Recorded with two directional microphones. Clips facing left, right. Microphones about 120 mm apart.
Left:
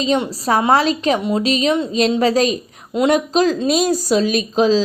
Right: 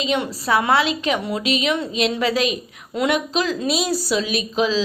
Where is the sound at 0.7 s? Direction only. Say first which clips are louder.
Left 4 dB; 40° left (ahead or behind).